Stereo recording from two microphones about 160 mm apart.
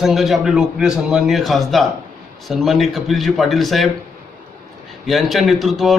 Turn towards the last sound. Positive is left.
turn(degrees=0)  # may be behind; listen again after turning